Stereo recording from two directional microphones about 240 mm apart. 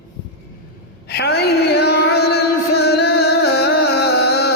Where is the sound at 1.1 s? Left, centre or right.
Left.